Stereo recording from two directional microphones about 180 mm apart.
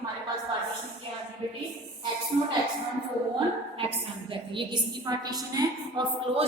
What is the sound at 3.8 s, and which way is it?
A woman's voice, 30° right (ahead or behind).